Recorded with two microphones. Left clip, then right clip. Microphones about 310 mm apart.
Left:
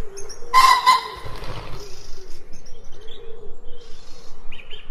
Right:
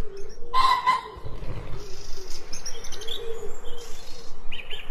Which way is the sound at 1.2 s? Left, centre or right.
Left.